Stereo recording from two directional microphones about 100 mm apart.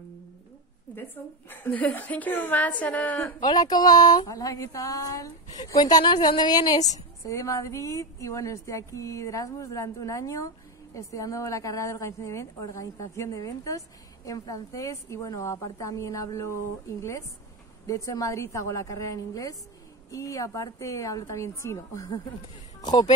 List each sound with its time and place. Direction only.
0.9 s a woman's voice: 20° left (ahead or behind)
3.3 s a woman's voice: 40° left (ahead or behind)
7.2 s a woman's voice: 30° left (ahead or behind)
17.8 s a woman's voice: 35° left (ahead or behind)
22.8 s speech: 45° left (ahead or behind)